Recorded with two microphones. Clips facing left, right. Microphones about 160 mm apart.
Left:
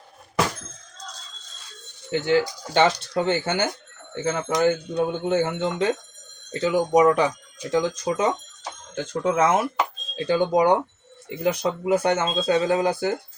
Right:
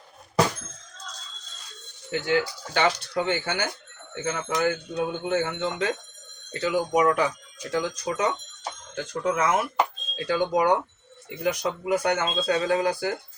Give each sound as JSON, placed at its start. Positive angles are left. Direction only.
{"t": 2.0, "sound": "speech", "side_deg": 25}